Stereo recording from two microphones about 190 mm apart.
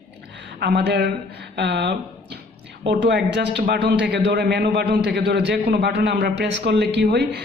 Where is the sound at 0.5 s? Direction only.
60° right (ahead or behind).